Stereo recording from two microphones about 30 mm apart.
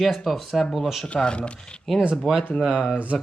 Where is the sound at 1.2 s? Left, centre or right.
Left.